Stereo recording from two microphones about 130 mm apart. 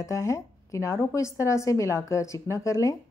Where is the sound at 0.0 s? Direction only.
25° left (ahead or behind).